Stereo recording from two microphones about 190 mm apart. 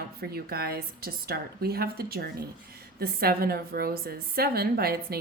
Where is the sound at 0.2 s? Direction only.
55° right (ahead or behind).